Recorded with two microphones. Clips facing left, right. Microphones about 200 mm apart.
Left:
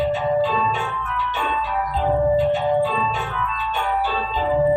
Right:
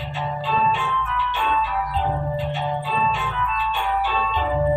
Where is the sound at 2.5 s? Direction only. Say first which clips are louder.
Left 7 dB; 40° left (ahead or behind).